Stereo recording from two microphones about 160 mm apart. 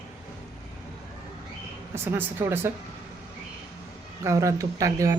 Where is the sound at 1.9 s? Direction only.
15° right (ahead or behind).